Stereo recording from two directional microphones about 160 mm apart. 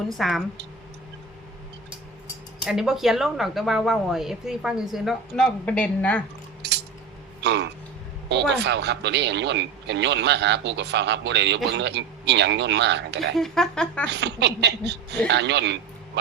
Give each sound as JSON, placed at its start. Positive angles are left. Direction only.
{"t": 0.1, "sound": "a woman's voice", "side_deg": 0}
{"t": 2.6, "sound": "a woman's voice", "side_deg": -5}
{"t": 6.6, "sound": "coin", "side_deg": -90}
{"t": 7.4, "sound": "burping", "side_deg": -90}
{"t": 8.3, "sound": "speech", "side_deg": -90}
{"t": 13.3, "sound": "a woman's voice", "side_deg": 0}
{"t": 14.1, "sound": "speech", "side_deg": -90}